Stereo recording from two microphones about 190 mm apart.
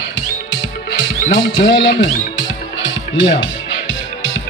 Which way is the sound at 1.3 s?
70° left (ahead or behind).